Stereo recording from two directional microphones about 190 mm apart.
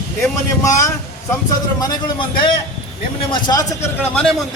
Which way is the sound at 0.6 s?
15° left (ahead or behind).